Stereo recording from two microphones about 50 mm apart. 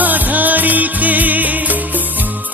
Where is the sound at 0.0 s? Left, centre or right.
Right.